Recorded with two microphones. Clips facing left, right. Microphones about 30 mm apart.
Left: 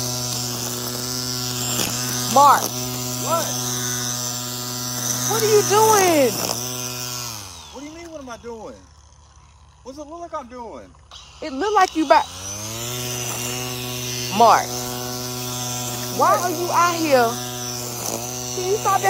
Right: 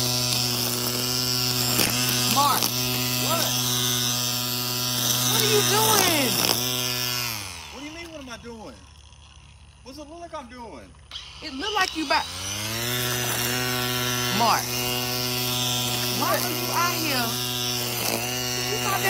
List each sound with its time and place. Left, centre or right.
0.0 s mains hum: right
0.7 s chainsaw: right
1.6 s electric shaver: right
4.8 s mains hum: right
5.7 s electric shaver: right
11.4 s speech: right
12.4 s chainsaw: right
14.5 s speech: right
15.0 s a sound: right
16.8 s speech: right
17.2 s electric shaver: right